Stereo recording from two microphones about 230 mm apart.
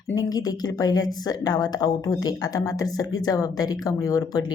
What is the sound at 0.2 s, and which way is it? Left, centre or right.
Speech, centre.